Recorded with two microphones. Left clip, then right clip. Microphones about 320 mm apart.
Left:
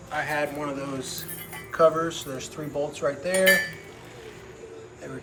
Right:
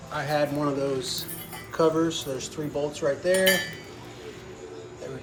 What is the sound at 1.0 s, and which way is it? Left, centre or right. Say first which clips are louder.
Speech: right 4 dB; centre.